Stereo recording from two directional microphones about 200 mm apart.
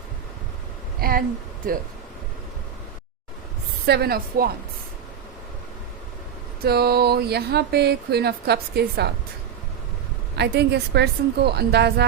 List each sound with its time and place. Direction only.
1.0 s a sound: 50° right (ahead or behind)
3.8 s speech: 50° right (ahead or behind)
6.6 s speech: 50° right (ahead or behind)
10.3 s a woman's voice: 55° right (ahead or behind)